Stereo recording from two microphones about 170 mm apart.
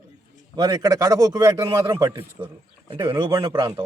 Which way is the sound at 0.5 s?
20° right (ahead or behind).